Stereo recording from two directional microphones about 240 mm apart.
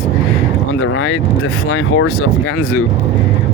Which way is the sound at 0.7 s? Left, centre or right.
Left.